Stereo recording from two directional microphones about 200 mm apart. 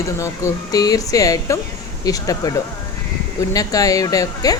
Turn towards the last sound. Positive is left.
turn(degrees=20)  # may be behind; listen again after turning